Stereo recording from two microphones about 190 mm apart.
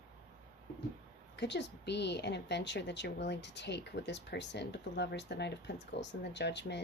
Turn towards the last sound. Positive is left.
turn(degrees=65)  # may be behind; listen again after turning